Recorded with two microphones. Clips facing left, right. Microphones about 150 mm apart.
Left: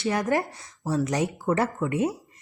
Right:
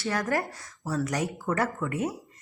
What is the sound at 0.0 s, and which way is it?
A woman's voice, 20° left (ahead or behind).